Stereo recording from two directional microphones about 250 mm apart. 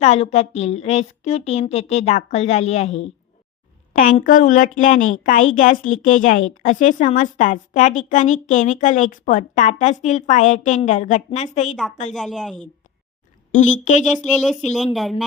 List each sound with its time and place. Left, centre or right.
0.0 s a woman's voice: left
12.1 s speech: centre
13.5 s a woman's voice: left
14.1 s speech: centre